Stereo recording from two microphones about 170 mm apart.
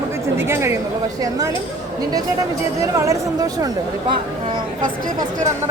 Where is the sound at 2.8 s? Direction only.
20° right (ahead or behind).